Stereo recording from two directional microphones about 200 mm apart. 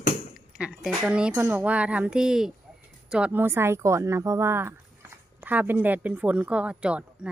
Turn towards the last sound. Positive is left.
turn(degrees=-5)  # may be behind; listen again after turning